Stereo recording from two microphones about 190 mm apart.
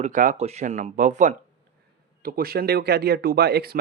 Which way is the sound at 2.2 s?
50° right (ahead or behind).